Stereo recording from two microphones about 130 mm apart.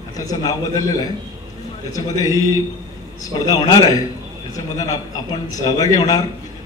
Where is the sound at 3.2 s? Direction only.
30° left (ahead or behind).